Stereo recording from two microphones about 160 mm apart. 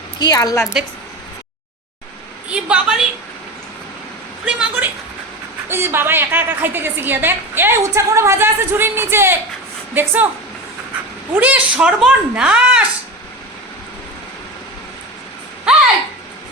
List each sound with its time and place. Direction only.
0.2 s a woman's voice: 25° left (ahead or behind)
2.5 s a woman's voice: 5° right (ahead or behind)
4.4 s a woman's voice: 10° right (ahead or behind)
11.3 s a woman's voice: 10° right (ahead or behind)